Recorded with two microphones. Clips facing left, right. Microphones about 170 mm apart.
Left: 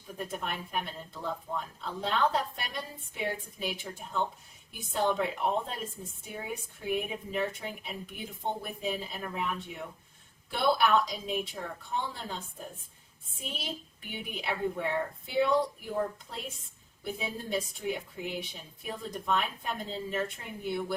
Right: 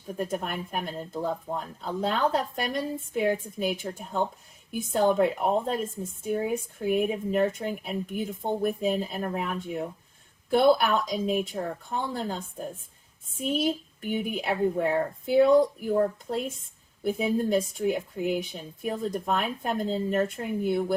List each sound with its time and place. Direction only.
0.2 s a woman's voice: 45° right (ahead or behind)
17.0 s a woman's voice: 45° right (ahead or behind)